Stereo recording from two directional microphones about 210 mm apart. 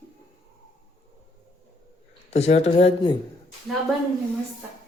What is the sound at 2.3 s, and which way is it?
Speech, 30° left (ahead or behind).